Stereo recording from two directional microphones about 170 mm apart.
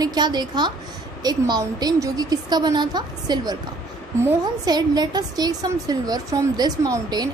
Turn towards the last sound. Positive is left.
turn(degrees=-20)  # may be behind; listen again after turning